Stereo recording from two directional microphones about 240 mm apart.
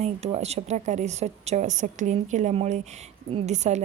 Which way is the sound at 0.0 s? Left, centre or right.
Right.